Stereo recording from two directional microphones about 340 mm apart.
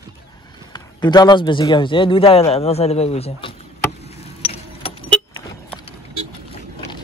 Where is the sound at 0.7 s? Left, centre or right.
Centre.